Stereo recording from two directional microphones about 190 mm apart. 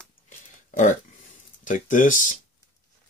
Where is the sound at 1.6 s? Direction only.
40° left (ahead or behind).